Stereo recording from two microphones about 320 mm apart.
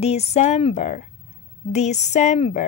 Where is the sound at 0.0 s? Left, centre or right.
Centre.